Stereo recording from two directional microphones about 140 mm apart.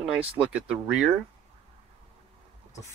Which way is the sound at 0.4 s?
5° right (ahead or behind).